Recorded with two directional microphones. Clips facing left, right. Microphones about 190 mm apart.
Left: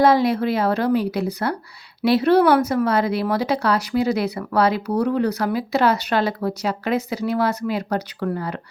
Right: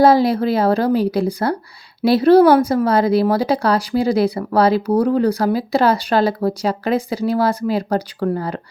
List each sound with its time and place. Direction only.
0.0 s speech: 35° right (ahead or behind)